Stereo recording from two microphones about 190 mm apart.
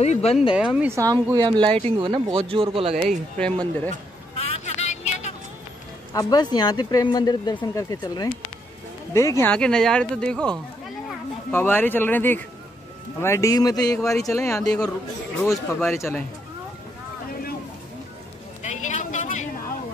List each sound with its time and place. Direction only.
0.0 s speech: 35° left (ahead or behind)
0.6 s speech: 5° right (ahead or behind); by 3.2 s 30° right (ahead or behind)
3.3 s speech: 5° left (ahead or behind)
4.6 s vehicle: 35° left (ahead or behind)
6.1 s speech: 20° left (ahead or behind); by 10.5 s 5° left (ahead or behind)
11.5 s speech: 10° left (ahead or behind)
18.6 s a sound: 40° left (ahead or behind)